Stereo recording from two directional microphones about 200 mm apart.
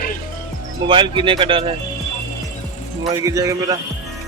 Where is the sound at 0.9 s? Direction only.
25° right (ahead or behind).